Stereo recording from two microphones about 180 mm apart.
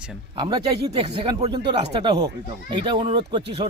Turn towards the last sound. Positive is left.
turn(degrees=-25)  # may be behind; listen again after turning